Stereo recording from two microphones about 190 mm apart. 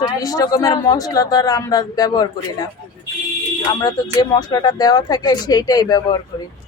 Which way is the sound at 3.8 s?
20° left (ahead or behind).